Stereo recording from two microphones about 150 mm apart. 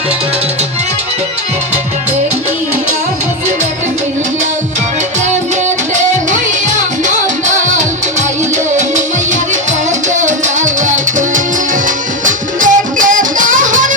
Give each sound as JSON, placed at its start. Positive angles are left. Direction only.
{"t": 7.1, "sound": "music", "side_deg": -55}
{"t": 10.1, "sound": "music", "side_deg": -55}